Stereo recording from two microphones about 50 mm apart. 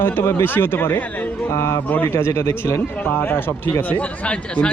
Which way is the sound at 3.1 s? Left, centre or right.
Left.